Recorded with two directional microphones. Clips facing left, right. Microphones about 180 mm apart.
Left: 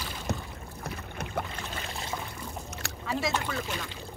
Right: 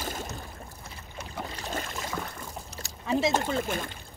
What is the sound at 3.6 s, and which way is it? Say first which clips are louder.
Speech: right 4 dB; 50° right (ahead or behind).